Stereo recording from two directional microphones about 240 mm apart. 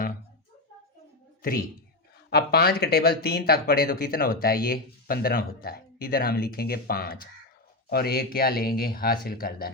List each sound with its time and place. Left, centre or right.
1.4 s speech: left